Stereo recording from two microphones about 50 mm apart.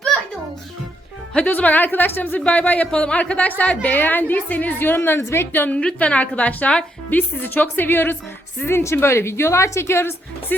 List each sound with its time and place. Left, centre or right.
1.5 s a woman's voice: left
2.4 s a woman's voice: left
5.7 s a woman's voice: left
8.6 s a woman's voice: left